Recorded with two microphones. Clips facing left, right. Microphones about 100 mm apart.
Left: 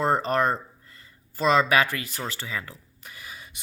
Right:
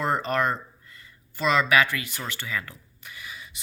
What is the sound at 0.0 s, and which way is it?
Speech, 35° left (ahead or behind).